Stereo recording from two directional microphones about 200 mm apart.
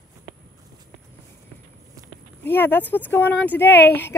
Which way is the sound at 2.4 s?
10° left (ahead or behind).